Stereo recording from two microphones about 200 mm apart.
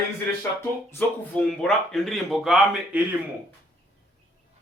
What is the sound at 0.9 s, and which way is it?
Speech, 5° left (ahead or behind).